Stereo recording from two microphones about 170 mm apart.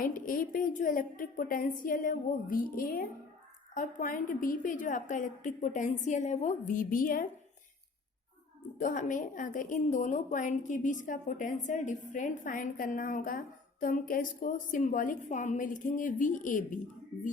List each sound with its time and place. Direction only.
0.0 s a woman's voice: 55° left (ahead or behind)
8.8 s a woman's voice: 50° left (ahead or behind)